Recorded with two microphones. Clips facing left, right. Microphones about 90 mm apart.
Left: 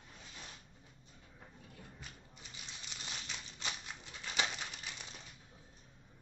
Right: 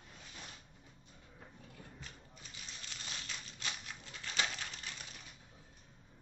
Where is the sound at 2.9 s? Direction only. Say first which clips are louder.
Left 1 dB; 20° left (ahead or behind).